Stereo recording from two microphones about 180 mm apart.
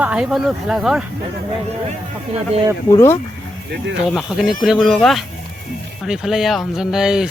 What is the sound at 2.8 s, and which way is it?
Speech, 15° left (ahead or behind).